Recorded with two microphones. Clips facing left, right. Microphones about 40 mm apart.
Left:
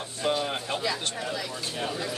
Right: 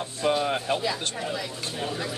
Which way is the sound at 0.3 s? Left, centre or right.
Centre.